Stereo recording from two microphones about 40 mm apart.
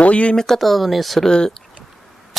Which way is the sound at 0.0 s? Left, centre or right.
Left.